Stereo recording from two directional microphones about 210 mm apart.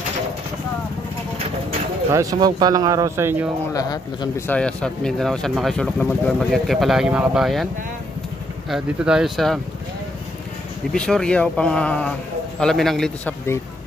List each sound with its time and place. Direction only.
2.1 s speech: 20° right (ahead or behind)
3.7 s a man's voice: 15° left (ahead or behind)
4.6 s speech: 5° left (ahead or behind)
8.6 s speech: centre (ahead or behind)
10.9 s speech: 5° left (ahead or behind)